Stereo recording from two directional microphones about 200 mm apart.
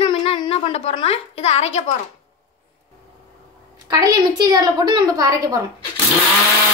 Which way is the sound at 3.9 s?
20° right (ahead or behind).